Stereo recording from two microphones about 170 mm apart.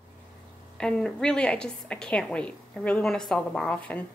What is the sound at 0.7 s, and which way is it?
A woman's voice, 5° left (ahead or behind).